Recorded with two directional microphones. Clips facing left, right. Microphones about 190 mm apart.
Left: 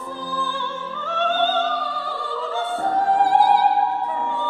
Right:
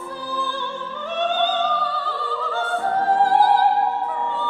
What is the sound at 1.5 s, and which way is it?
Opera, 10° left (ahead or behind).